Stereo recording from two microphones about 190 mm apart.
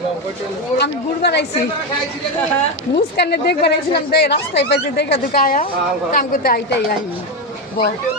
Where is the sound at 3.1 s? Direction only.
60° left (ahead or behind).